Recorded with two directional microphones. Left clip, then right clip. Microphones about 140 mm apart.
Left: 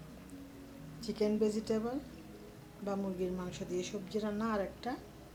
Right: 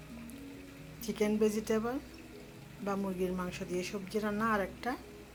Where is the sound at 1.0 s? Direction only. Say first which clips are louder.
Right 2 dB; 10° right (ahead or behind).